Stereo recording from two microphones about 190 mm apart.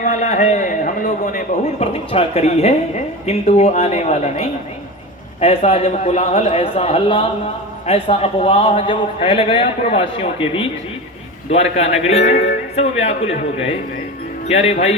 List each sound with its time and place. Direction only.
0.0 s a man's voice: 40° left (ahead or behind)
1.8 s a man's voice: 30° left (ahead or behind)